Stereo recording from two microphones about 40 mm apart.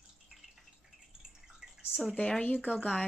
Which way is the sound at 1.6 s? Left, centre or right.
Centre.